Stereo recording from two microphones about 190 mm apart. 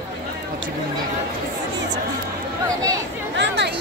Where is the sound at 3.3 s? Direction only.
65° right (ahead or behind).